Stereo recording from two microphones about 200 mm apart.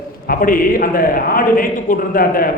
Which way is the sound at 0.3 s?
45° left (ahead or behind).